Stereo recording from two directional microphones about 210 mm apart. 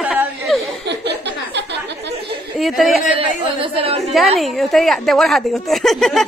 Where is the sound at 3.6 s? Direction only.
25° right (ahead or behind).